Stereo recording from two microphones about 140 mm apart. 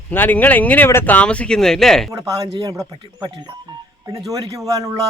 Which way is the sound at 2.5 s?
25° right (ahead or behind).